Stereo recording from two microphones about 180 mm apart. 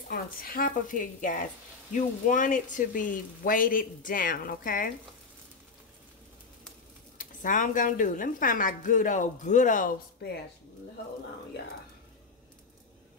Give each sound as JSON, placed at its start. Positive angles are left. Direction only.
{"t": 0.1, "sound": "a woman's voice", "side_deg": 50}
{"t": 7.2, "sound": "a woman's voice", "side_deg": 45}